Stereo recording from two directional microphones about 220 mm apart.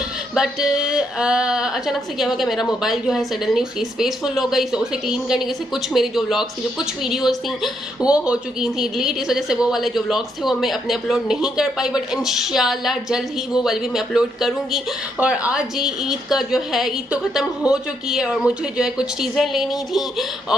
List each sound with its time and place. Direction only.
0.3 s a woman's voice: 5° right (ahead or behind)